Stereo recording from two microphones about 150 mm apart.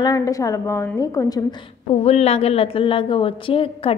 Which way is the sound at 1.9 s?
45° left (ahead or behind).